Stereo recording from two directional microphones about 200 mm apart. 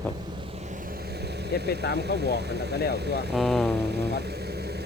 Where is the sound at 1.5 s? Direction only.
55° right (ahead or behind).